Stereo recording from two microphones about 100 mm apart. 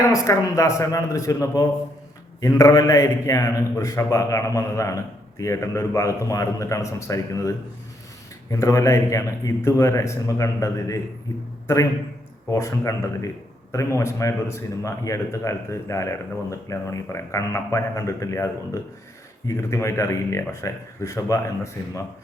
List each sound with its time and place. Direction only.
0.1 s a man's voice: 35° left (ahead or behind)
12.5 s a man's voice: 30° left (ahead or behind)